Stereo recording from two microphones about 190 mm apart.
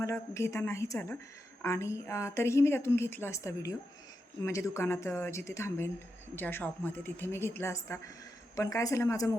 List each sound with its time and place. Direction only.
0.0 s a woman's voice: 15° left (ahead or behind)